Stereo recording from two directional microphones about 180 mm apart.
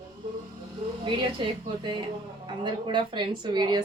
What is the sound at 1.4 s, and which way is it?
A woman's voice, 25° right (ahead or behind).